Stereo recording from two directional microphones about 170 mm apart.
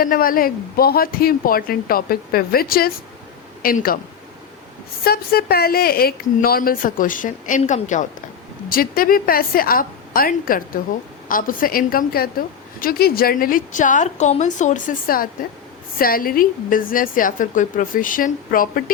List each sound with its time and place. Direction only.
0.0 s speech: 55° left (ahead or behind)
5.0 s speech: 65° left (ahead or behind); by 8.0 s 45° left (ahead or behind)
8.7 s a woman's voice: 60° left (ahead or behind)